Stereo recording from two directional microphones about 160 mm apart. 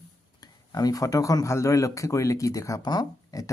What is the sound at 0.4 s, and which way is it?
Speech, 25° left (ahead or behind).